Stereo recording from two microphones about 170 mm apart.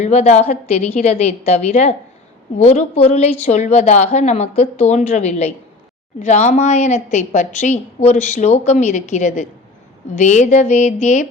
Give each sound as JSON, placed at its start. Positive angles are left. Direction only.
{"t": 0.0, "sound": "a woman's voice", "side_deg": 40}